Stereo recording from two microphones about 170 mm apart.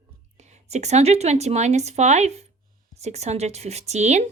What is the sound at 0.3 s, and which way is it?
A woman's voice, 40° right (ahead or behind).